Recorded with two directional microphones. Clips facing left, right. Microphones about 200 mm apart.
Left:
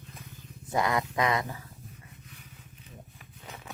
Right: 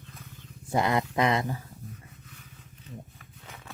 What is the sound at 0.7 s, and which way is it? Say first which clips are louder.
Speech: right 2 dB; 25° right (ahead or behind).